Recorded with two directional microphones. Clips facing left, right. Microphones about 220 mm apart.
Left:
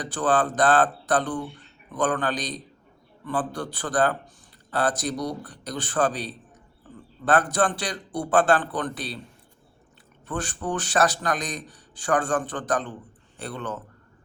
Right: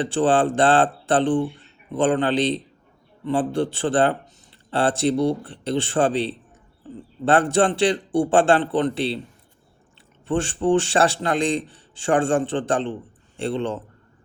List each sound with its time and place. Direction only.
0.0 s a man's voice: 25° right (ahead or behind)
10.2 s a man's voice: 25° right (ahead or behind)